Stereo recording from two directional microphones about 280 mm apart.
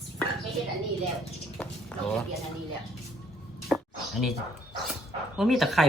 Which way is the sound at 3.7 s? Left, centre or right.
Centre.